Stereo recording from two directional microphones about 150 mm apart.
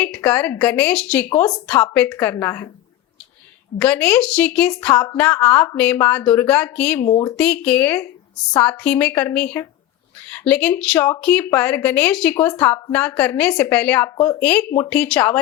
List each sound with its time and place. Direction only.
0.0 s speech: 10° left (ahead or behind)
3.8 s speech: 10° left (ahead or behind)
7.1 s speech: 25° left (ahead or behind)
7.3 s speech: 10° left (ahead or behind)